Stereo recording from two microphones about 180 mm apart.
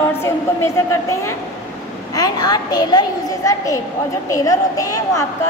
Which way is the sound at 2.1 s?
20° left (ahead or behind).